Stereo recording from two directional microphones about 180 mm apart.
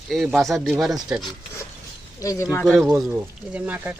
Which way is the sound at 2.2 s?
15° left (ahead or behind).